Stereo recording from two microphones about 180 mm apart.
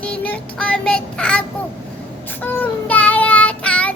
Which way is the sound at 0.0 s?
10° left (ahead or behind).